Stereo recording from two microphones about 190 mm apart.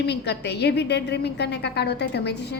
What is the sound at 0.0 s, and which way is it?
A woman's voice, 60° left (ahead or behind).